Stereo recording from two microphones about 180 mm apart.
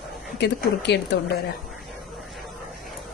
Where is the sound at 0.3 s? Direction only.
70° left (ahead or behind).